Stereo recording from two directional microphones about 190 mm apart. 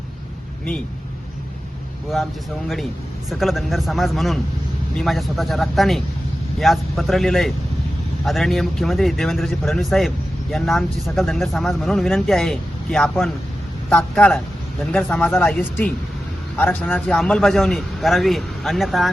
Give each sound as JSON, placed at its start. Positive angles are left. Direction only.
{"t": 3.2, "sound": "speech", "side_deg": 0}